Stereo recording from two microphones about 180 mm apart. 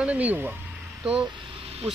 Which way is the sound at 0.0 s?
10° right (ahead or behind).